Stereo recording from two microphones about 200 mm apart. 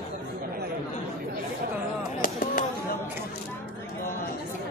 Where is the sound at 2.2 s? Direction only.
45° left (ahead or behind).